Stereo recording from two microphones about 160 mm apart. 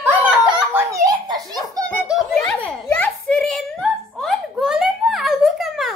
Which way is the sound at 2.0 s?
Centre (ahead or behind).